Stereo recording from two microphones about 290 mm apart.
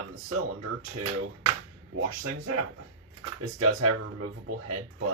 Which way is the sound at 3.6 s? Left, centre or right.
Right.